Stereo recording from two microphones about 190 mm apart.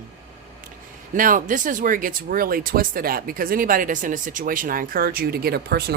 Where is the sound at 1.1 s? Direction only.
45° right (ahead or behind).